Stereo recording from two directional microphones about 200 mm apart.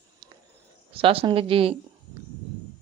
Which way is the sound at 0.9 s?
30° right (ahead or behind).